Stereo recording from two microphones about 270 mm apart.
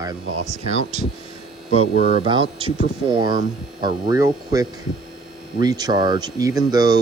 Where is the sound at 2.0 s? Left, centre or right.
Right.